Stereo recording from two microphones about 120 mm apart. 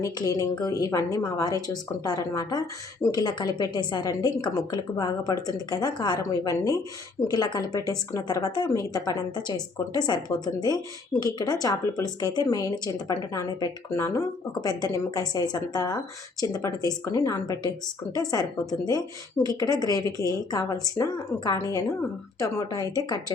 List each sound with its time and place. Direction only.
0.0 s speech: 30° left (ahead or behind)